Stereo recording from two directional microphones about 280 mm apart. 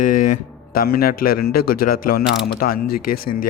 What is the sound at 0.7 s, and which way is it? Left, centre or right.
Speech, left.